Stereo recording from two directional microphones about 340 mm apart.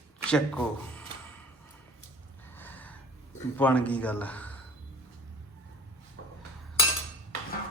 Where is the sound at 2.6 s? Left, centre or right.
Centre.